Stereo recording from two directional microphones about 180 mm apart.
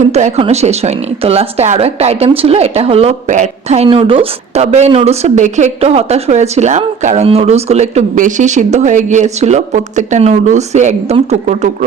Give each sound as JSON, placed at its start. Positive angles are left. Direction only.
{"t": 0.0, "sound": "a woman's voice", "side_deg": -40}